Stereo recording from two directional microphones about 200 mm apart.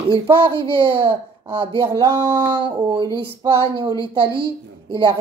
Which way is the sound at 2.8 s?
20° right (ahead or behind).